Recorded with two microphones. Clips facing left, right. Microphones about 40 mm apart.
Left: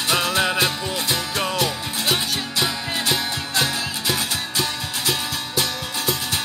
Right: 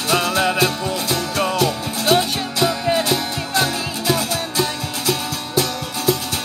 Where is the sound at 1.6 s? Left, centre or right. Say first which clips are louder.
Right 4 dB; centre.